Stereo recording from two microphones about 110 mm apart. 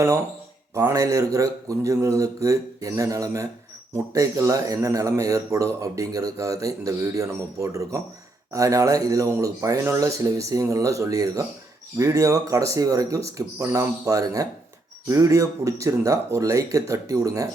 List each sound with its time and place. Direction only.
0.7 s speech: 25° right (ahead or behind)